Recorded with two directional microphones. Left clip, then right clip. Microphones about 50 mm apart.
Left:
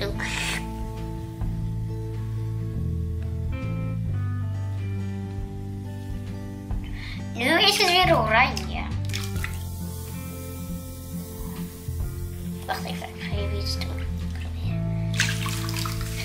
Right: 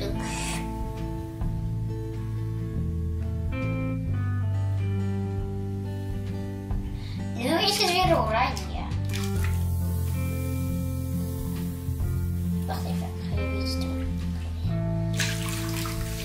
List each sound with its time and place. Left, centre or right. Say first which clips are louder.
3.5 s music: right 5 dB; centre
4.9 s music: right 4 dB; centre
7.3 s music: left 5 dB; left
9.1 s music: left 1 dB; centre
10.6 s music: right 5 dB; centre
13.6 s music: even; left
15.0 s bathtub: left 6 dB; centre